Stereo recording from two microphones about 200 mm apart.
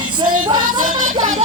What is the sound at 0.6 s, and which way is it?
Music, 90° right.